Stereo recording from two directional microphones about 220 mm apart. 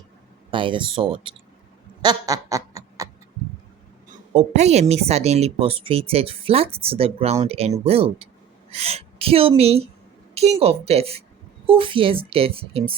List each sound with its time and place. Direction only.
0.5 s a woman's voice: 20° right (ahead or behind)
2.0 s a sound: 15° right (ahead or behind)
4.1 s a woman's voice: 30° right (ahead or behind)